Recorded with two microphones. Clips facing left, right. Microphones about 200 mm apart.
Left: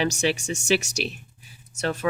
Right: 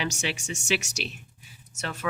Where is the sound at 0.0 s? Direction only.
40° left (ahead or behind).